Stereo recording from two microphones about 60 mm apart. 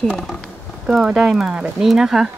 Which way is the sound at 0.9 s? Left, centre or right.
Centre.